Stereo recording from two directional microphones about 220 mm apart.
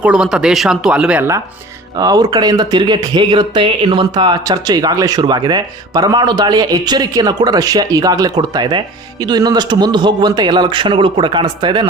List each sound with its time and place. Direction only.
0.0 s speech: 5° right (ahead or behind); by 11.9 s 20° right (ahead or behind)